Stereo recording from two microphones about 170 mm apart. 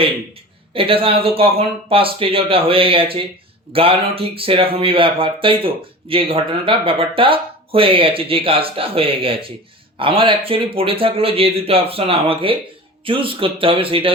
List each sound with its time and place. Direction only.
0.7 s speech: 30° right (ahead or behind)